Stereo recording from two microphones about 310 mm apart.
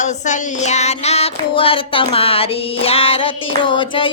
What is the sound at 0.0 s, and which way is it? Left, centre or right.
Child singing, left.